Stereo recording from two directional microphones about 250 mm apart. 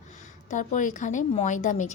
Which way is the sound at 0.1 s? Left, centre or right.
Left.